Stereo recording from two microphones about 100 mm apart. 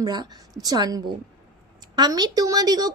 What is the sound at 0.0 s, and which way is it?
A woman's voice, 45° right (ahead or behind).